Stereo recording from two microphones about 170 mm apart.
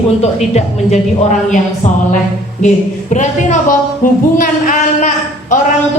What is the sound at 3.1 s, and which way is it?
A woman's voice, 45° left (ahead or behind).